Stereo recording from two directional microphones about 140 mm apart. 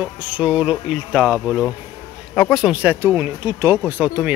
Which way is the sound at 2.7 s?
10° right (ahead or behind).